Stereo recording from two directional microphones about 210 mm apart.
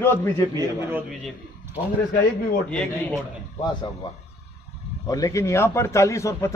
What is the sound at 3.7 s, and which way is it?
Speech, 25° left (ahead or behind).